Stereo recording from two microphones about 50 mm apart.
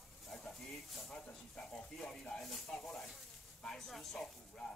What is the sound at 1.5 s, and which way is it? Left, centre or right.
Speech, centre.